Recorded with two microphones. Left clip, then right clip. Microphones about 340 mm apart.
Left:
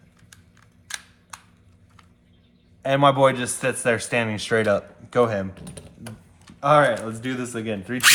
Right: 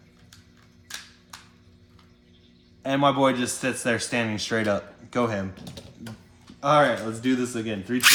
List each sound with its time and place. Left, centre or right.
2.8 s a man's voice: left